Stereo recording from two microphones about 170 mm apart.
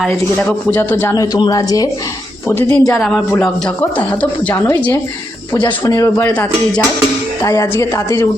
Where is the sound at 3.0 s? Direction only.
Centre (ahead or behind).